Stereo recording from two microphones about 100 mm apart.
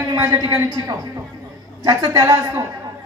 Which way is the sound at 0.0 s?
35° right (ahead or behind).